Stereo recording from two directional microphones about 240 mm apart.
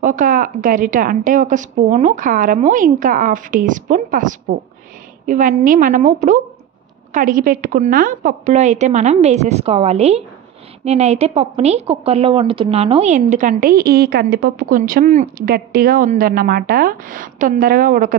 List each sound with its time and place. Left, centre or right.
0.0 s a woman's voice: right